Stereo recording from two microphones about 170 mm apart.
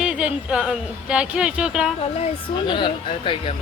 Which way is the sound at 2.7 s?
30° left (ahead or behind).